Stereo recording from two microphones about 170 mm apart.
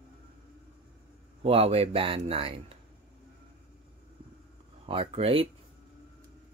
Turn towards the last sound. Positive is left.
turn(degrees=-30)  # may be behind; listen again after turning